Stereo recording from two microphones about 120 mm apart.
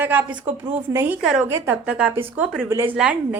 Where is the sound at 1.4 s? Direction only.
15° right (ahead or behind).